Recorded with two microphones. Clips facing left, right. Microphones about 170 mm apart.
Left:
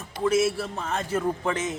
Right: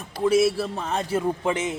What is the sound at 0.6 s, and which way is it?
Speech, 20° right (ahead or behind).